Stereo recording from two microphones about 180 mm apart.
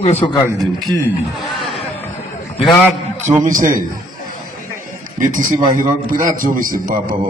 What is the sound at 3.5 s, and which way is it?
Speech, 50° right (ahead or behind).